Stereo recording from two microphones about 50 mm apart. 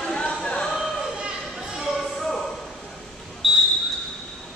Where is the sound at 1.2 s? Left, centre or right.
Centre.